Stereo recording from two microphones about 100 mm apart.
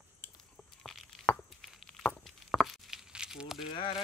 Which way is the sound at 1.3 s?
10° left (ahead or behind).